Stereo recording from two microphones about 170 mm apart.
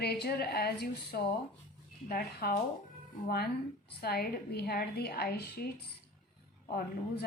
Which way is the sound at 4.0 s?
65° left (ahead or behind).